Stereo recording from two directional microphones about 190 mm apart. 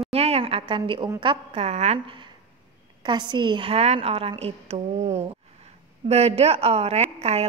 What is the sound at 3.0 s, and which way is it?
A woman's voice, 25° right (ahead or behind).